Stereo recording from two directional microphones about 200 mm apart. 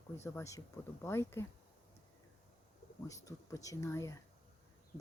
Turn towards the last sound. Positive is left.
turn(degrees=15)  # may be behind; listen again after turning